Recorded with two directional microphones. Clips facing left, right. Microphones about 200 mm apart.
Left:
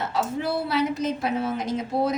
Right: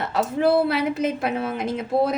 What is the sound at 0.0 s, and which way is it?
A woman's voice, 60° right (ahead or behind).